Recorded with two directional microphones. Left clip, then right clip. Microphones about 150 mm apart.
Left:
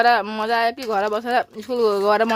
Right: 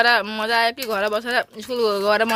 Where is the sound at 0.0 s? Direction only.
20° left (ahead or behind).